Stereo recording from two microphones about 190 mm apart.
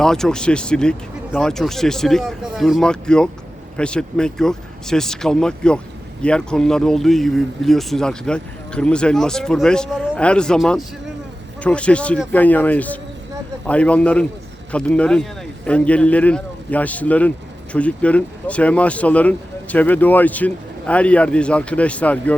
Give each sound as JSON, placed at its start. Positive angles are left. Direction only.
{"t": 0.0, "sound": "speech", "side_deg": 5}